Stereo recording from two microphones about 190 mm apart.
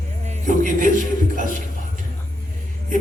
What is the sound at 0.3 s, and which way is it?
Speech, 40° right (ahead or behind).